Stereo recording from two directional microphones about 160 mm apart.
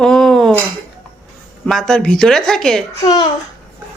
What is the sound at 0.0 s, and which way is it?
Cutlery, centre (ahead or behind).